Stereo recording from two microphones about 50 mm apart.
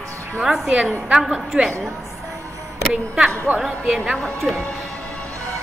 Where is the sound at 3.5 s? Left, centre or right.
Centre.